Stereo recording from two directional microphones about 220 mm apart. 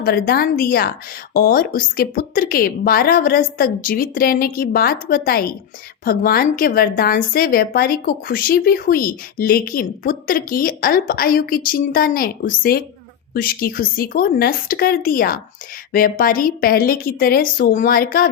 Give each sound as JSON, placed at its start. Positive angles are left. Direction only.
{"t": 0.0, "sound": "a woman's voice", "side_deg": 45}